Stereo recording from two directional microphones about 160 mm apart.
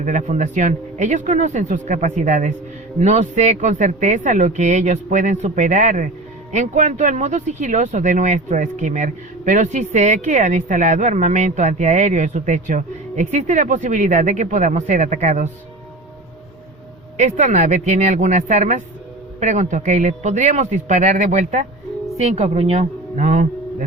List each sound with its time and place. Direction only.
0.0 s speech: 50° right (ahead or behind)
17.2 s speech: 45° right (ahead or behind)